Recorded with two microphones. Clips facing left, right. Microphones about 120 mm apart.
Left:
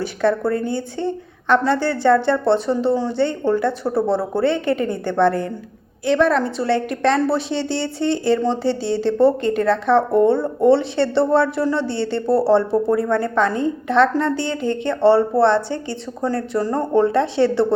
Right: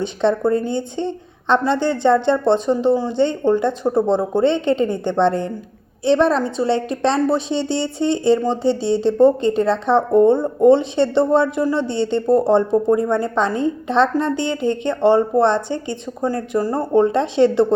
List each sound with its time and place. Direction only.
0.0 s a woman's voice: 20° right (ahead or behind)